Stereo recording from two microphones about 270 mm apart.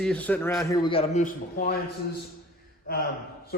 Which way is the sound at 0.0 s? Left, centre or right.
Centre.